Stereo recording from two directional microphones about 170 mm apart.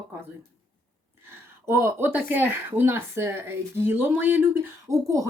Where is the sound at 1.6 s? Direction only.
15° right (ahead or behind).